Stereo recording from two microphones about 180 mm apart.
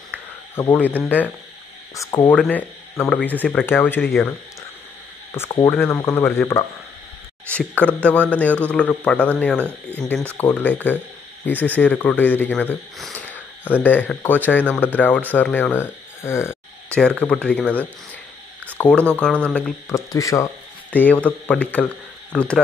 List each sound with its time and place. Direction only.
0.6 s speech: 10° left (ahead or behind)
2.0 s speech: 25° left (ahead or behind)
2.2 s speech: 10° left (ahead or behind)
5.4 s speech: 15° left (ahead or behind)
16.2 s a sound: 15° left (ahead or behind)
17.2 s speech: 5° left (ahead or behind)
19.9 s speech: 15° left (ahead or behind)